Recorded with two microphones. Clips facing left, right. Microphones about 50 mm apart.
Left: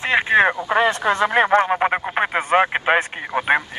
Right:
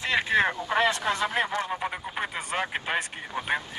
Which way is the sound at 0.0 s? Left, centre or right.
Left.